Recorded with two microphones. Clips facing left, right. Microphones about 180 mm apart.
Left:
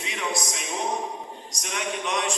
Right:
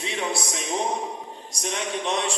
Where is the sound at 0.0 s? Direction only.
30° right (ahead or behind).